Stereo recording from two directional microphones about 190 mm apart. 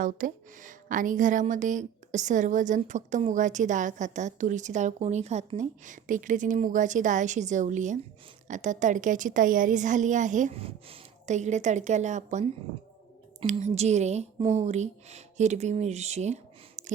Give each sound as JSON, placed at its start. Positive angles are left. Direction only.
{"t": 0.0, "sound": "a woman's voice", "side_deg": -45}